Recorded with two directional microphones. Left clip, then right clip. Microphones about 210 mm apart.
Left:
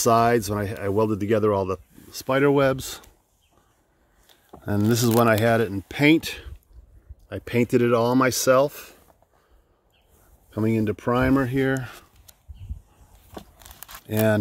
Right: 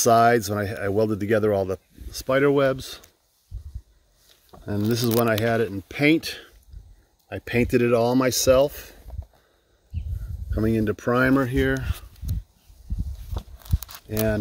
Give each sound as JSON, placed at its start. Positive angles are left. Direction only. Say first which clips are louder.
{"t": 0.0, "sound": "speech", "louder": "right 2 dB", "side_deg": 5}
{"t": 4.6, "sound": "speech", "louder": "left 2 dB", "side_deg": 25}
{"t": 10.5, "sound": "speech", "louder": "even", "side_deg": 5}
{"t": 13.4, "sound": "a sound", "louder": "right 3 dB", "side_deg": 5}
{"t": 14.0, "sound": "speech", "louder": "left 3 dB", "side_deg": 30}